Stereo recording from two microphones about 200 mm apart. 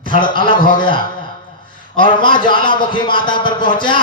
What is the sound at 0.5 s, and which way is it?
Speech, 45° left (ahead or behind).